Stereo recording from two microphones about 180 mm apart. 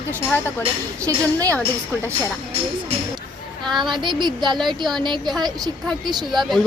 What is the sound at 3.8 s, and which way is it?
A woman's voice, 25° right (ahead or behind).